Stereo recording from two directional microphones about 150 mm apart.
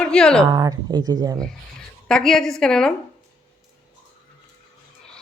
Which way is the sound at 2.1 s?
5° left (ahead or behind).